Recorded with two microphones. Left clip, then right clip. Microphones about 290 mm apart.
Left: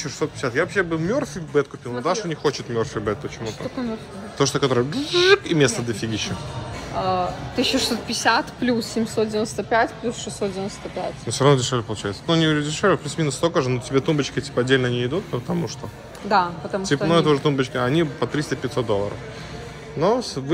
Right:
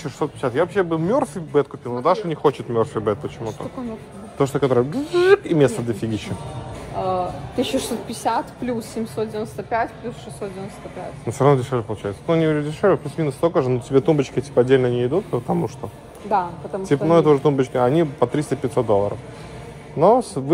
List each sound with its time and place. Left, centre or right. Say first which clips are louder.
0.0 s speech: right 1 dB; centre
4.4 s speech: right 2 dB; centre
7.5 s a woman's voice: left 2 dB; centre
11.3 s speech: right 1 dB; centre
16.3 s speech: left 2 dB; left
16.8 s speech: right 3 dB; centre